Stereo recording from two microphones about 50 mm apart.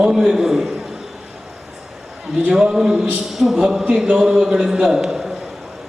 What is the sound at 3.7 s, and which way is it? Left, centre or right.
A man's voice, centre.